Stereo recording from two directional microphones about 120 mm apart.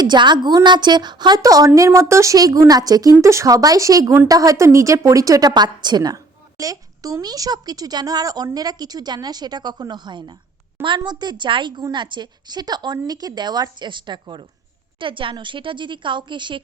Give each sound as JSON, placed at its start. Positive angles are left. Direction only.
{"t": 0.0, "sound": "a woman's voice", "side_deg": -40}